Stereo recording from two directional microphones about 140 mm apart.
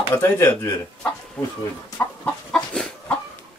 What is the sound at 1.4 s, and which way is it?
Speech, 5° left (ahead or behind).